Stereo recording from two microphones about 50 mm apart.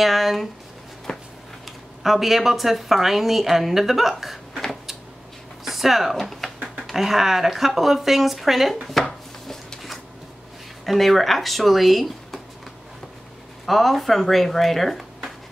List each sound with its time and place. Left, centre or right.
0.0 s speech: centre
1.1 s a sound: centre
2.0 s a woman's voice: centre
5.7 s a woman's voice: centre
8.8 s chopping: centre
10.9 s a woman's voice: centre
13.7 s speech: centre